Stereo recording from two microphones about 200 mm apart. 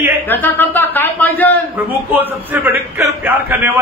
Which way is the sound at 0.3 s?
10° left (ahead or behind).